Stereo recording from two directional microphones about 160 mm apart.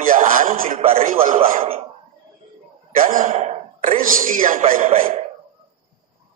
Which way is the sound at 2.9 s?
60° right (ahead or behind).